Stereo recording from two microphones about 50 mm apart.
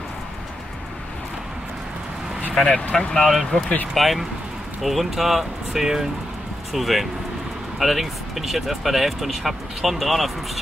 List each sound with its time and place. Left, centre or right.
2.5 s speech: centre
2.9 s speech: centre
3.3 s speech: centre